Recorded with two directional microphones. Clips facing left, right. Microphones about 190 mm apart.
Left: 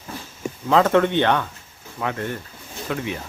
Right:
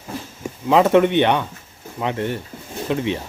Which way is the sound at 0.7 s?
15° right (ahead or behind).